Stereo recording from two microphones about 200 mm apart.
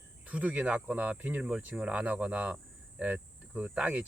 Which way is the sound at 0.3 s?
5° right (ahead or behind).